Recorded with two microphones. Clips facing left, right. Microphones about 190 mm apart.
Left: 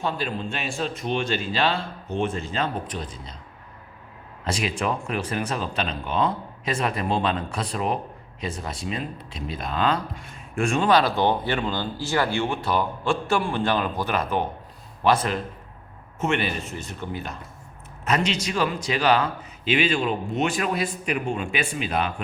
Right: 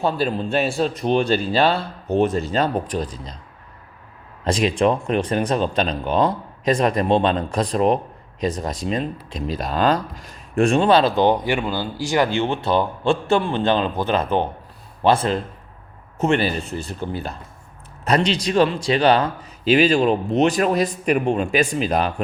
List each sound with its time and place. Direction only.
0.0 s speech: 35° right (ahead or behind)
4.4 s a man's voice: 35° right (ahead or behind)